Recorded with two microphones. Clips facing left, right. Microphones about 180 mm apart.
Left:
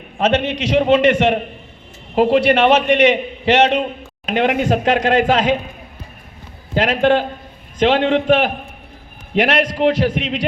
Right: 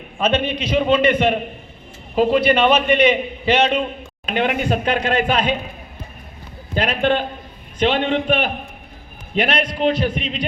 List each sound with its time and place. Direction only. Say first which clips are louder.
0.2 s a man's voice: left 3 dB; 80° left
4.4 s speech: left 3 dB; 90° left
6.7 s speech: left 4 dB; 90° left